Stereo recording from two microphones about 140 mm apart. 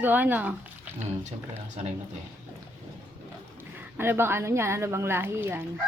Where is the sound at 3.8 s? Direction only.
15° right (ahead or behind).